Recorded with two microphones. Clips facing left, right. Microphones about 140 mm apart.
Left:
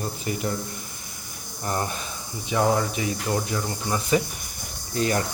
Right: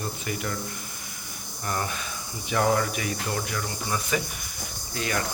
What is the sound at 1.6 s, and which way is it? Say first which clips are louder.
Speech: left 3 dB; 30° left (ahead or behind).